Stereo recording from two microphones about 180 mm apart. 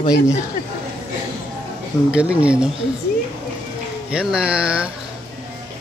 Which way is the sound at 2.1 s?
5° right (ahead or behind).